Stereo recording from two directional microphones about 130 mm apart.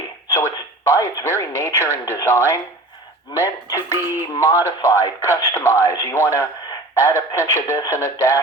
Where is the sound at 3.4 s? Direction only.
25° left (ahead or behind).